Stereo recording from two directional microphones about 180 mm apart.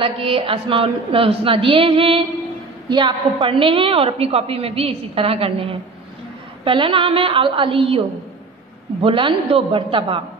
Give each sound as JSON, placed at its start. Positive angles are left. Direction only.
{"t": 0.0, "sound": "a woman's voice", "side_deg": -30}
{"t": 9.0, "sound": "a woman's voice", "side_deg": -30}